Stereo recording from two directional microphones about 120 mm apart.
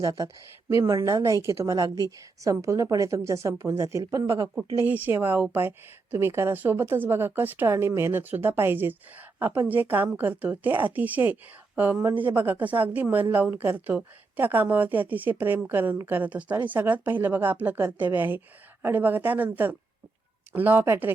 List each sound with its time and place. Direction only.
0.0 s a woman's voice: 30° right (ahead or behind)
4.9 s a woman's voice: 15° right (ahead or behind)